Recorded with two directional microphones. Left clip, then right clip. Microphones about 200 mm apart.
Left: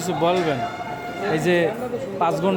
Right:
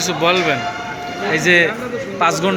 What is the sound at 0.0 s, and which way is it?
A man's voice, 20° left (ahead or behind).